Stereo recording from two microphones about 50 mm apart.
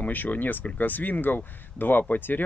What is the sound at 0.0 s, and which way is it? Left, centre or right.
Speech, left.